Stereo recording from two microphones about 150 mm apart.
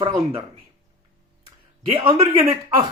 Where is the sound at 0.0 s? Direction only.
40° right (ahead or behind).